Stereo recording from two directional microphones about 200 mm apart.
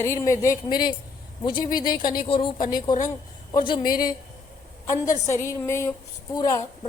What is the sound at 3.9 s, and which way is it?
Speech, 45° left (ahead or behind).